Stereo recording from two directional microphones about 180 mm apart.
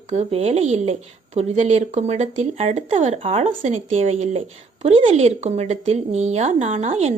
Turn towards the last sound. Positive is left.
turn(degrees=-35)  # may be behind; listen again after turning